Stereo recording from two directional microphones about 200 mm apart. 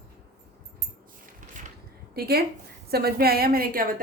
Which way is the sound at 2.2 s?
50° right (ahead or behind).